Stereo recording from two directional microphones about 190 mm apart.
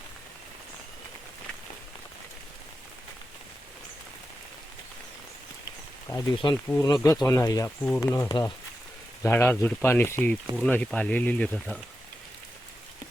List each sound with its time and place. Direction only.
6.1 s speech: 15° left (ahead or behind)